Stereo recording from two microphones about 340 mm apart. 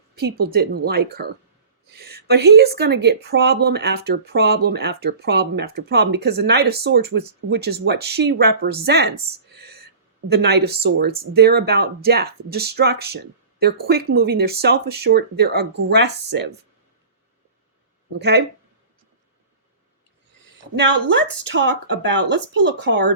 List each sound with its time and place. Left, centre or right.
0.2 s speech: right
18.2 s speech: right
20.7 s speech: right